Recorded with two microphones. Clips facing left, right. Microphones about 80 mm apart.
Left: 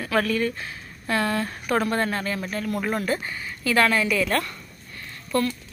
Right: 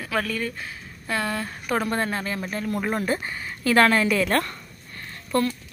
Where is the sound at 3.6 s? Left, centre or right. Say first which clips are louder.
Right 2 dB; right.